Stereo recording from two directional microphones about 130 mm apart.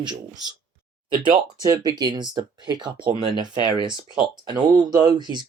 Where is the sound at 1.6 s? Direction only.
30° right (ahead or behind).